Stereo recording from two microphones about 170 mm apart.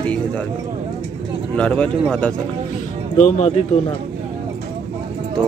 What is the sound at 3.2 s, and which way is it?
Speech, 45° left (ahead or behind).